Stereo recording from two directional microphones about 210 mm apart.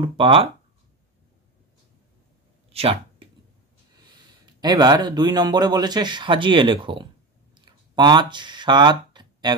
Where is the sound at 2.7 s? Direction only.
25° right (ahead or behind).